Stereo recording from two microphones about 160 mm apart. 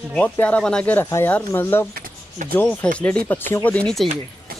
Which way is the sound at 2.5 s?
10° left (ahead or behind).